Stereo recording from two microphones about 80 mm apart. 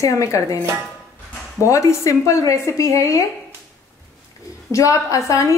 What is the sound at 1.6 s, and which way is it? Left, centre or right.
Speech, left.